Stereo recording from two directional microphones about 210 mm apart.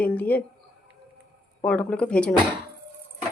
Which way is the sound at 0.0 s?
5° left (ahead or behind).